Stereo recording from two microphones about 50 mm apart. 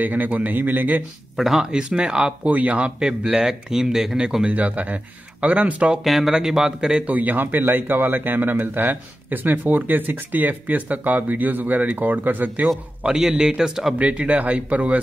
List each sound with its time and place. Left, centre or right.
0.0 s speech: right
1.3 s speech: centre
1.6 s speech: centre
2.5 s speech: right
3.0 s speech: centre
4.6 s speech: right
6.0 s speech: centre
7.1 s speech: right
13.0 s speech: centre
13.9 s speech: right